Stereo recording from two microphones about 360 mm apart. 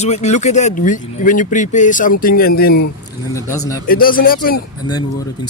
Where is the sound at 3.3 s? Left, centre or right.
Centre.